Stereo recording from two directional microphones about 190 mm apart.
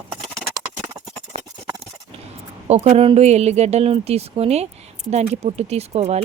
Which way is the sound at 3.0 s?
30° right (ahead or behind).